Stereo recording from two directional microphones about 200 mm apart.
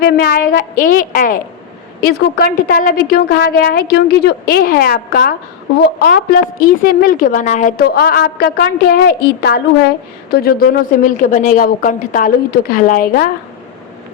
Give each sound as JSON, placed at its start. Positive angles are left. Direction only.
{"t": 0.0, "sound": "a woman's voice", "side_deg": 50}